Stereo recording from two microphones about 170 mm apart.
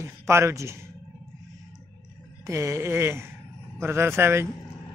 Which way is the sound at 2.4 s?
15° right (ahead or behind).